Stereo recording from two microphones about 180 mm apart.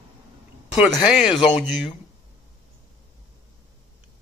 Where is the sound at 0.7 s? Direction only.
Centre (ahead or behind).